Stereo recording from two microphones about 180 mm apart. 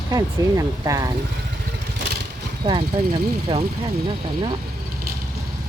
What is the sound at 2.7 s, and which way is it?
Speech, 30° right (ahead or behind).